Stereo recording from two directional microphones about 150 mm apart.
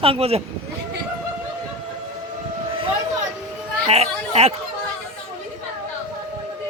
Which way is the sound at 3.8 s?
45° right (ahead or behind).